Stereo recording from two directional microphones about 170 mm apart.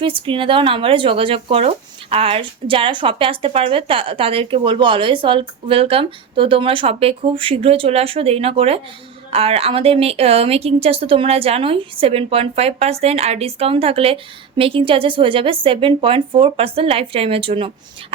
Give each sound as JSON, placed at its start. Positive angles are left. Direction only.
{"t": 0.0, "sound": "speech", "side_deg": -30}